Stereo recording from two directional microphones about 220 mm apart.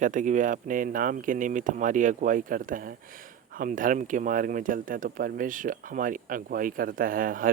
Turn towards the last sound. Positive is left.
turn(degrees=-40)  # may be behind; listen again after turning